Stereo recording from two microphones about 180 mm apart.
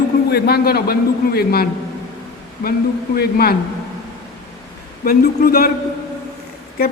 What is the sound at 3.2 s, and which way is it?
Speech, 60° left (ahead or behind).